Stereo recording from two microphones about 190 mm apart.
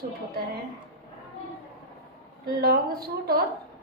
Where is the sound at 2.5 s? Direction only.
55° right (ahead or behind).